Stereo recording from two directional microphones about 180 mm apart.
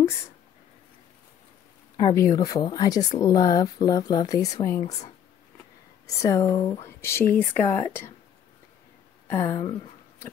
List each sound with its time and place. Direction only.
2.0 s speech: 20° left (ahead or behind)
4.7 s speech: 40° left (ahead or behind)
6.0 s speech: 15° left (ahead or behind)
9.3 s speech: 15° left (ahead or behind)